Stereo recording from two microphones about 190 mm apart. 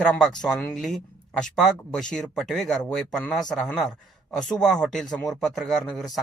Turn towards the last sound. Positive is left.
turn(degrees=0)  # may be behind; listen again after turning